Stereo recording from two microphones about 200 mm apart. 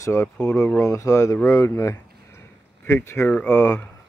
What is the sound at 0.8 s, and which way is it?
Speech, 15° left (ahead or behind).